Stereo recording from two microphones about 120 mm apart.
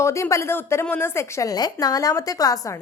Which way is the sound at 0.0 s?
25° left (ahead or behind).